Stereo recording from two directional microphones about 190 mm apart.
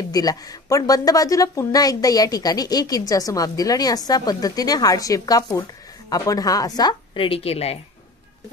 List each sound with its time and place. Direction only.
0.1 s a woman's voice: 20° left (ahead or behind)